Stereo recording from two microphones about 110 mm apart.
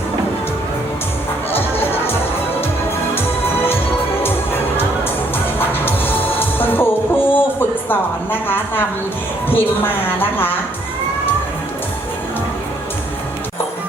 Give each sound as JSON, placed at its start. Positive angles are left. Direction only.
{"t": 1.5, "sound": "music", "side_deg": 20}
{"t": 3.2, "sound": "music", "side_deg": 20}
{"t": 7.9, "sound": "a sound", "side_deg": 20}
{"t": 9.5, "sound": "a woman's voice", "side_deg": 20}